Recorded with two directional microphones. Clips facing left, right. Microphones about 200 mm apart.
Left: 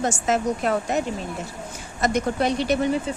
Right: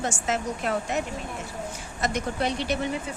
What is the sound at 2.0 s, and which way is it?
Speech, 45° left (ahead or behind).